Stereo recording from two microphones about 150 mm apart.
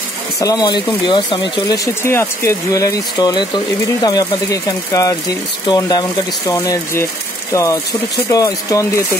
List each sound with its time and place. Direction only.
0.4 s speech: 25° left (ahead or behind)
2.0 s speech: 15° left (ahead or behind)